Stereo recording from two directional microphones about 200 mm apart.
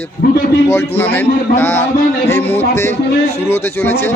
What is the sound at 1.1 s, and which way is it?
A man's voice, 10° left (ahead or behind).